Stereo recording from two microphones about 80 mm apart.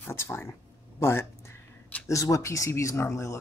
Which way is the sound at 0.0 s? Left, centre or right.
Left.